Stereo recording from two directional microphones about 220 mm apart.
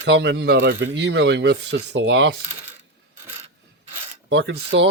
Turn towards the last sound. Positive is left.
turn(degrees=-55)  # may be behind; listen again after turning